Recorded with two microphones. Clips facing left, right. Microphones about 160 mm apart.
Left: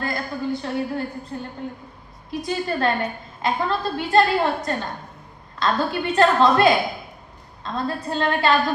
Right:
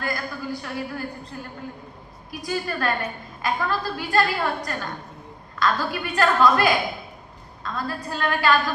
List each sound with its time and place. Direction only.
0.0 s a woman's voice: 25° left (ahead or behind)
2.5 s a woman's voice: 25° left (ahead or behind)